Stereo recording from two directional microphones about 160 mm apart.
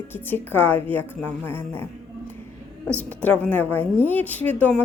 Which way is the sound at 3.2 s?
10° left (ahead or behind).